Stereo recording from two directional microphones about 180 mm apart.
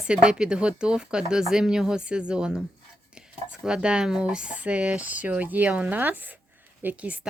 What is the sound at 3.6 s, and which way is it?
Speech, 5° right (ahead or behind).